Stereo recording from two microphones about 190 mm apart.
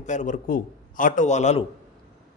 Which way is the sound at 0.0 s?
40° left (ahead or behind).